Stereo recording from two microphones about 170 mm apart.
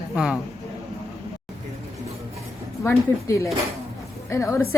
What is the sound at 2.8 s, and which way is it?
A woman's voice, 15° left (ahead or behind).